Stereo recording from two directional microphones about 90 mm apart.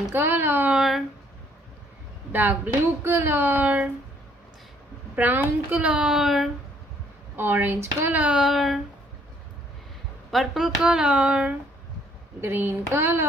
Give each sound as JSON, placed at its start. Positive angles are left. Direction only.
{"t": 0.1, "sound": "speech", "side_deg": -25}
{"t": 0.7, "sound": "speech", "side_deg": -5}
{"t": 2.3, "sound": "speech", "side_deg": -20}
{"t": 5.1, "sound": "a woman's voice", "side_deg": -20}
{"t": 7.3, "sound": "speech", "side_deg": -25}
{"t": 8.2, "sound": "speech", "side_deg": -10}
{"t": 10.3, "sound": "a woman's voice", "side_deg": -5}
{"t": 12.4, "sound": "speech", "side_deg": -25}